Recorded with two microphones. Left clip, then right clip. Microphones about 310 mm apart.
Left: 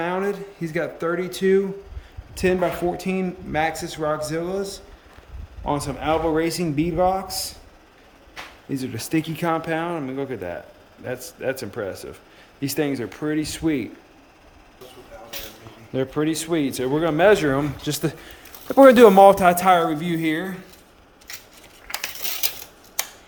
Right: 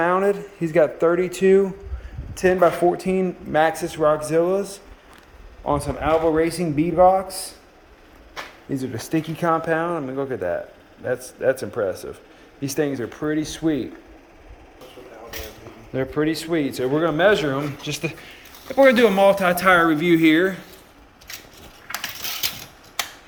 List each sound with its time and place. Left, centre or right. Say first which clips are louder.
0.0 s speech: right 5 dB; centre
5.6 s speech: right 2 dB; centre
8.7 s speech: even; centre
15.9 s speech: right 1 dB; centre
21.9 s typewriter: right 1 dB; left